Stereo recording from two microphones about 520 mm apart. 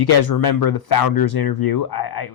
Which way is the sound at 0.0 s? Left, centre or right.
Left.